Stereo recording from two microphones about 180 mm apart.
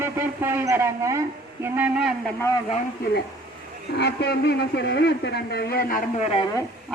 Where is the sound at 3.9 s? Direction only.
70° left (ahead or behind).